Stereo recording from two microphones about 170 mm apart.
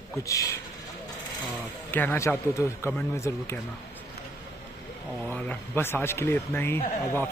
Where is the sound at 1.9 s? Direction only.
10° left (ahead or behind).